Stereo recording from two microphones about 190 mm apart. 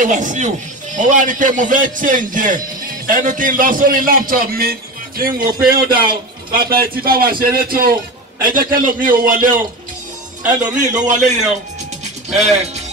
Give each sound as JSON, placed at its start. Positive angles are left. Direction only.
{"t": 0.0, "sound": "a man's voice", "side_deg": -40}
{"t": 12.0, "sound": "music", "side_deg": -35}